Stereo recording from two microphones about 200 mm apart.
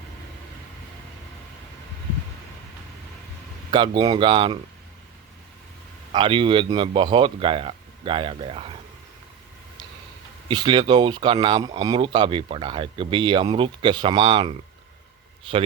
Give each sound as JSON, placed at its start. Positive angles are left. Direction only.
{"t": 3.7, "sound": "speech", "side_deg": -25}
{"t": 6.1, "sound": "speech", "side_deg": -25}
{"t": 10.5, "sound": "speech", "side_deg": -20}